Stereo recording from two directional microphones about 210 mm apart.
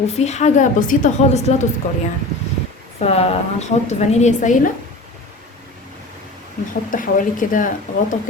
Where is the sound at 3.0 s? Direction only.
30° left (ahead or behind).